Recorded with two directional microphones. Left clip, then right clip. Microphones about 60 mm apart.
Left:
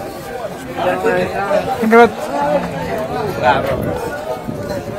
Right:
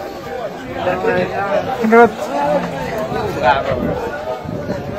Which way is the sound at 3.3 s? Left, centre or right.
Centre.